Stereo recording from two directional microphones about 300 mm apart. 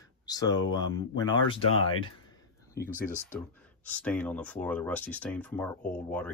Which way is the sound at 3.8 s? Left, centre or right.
Centre.